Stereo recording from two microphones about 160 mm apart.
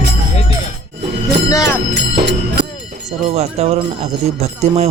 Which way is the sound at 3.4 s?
40° right (ahead or behind).